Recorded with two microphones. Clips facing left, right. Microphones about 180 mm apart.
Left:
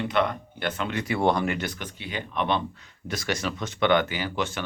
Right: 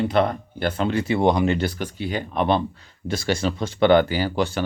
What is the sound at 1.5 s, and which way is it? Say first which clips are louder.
Speech: right 7 dB; 30° right (ahead or behind).